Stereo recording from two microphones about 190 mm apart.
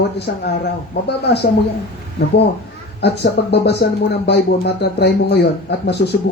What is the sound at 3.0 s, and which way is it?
Speech, 60° left (ahead or behind).